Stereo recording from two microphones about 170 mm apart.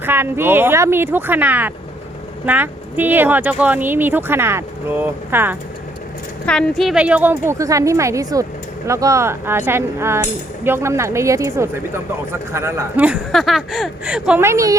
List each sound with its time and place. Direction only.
0.0 s speech: 15° right (ahead or behind)
6.4 s speech: 5° left (ahead or behind); by 13.1 s 10° right (ahead or behind)
13.3 s speech: centre (ahead or behind); by 14.8 s 20° right (ahead or behind)